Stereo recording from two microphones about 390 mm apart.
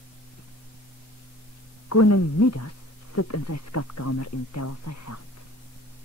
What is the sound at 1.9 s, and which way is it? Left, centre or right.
Speech, left.